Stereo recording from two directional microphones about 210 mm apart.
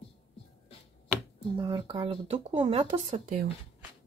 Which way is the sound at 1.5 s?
20° right (ahead or behind).